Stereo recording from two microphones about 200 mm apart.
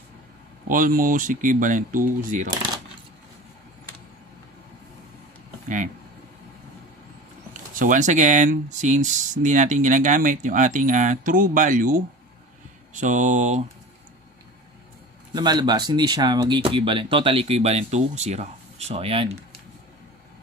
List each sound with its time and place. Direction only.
0.7 s speech: 45° right (ahead or behind)
7.7 s speech: 40° right (ahead or behind)
15.3 s speech: 20° right (ahead or behind)